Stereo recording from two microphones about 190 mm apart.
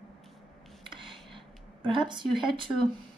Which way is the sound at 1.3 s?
25° right (ahead or behind).